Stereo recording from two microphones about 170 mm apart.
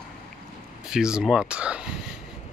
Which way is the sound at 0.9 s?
5° right (ahead or behind).